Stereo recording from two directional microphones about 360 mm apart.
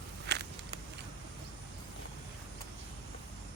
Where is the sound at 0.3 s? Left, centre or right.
Right.